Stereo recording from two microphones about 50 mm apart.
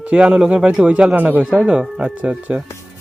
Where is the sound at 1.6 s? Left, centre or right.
Centre.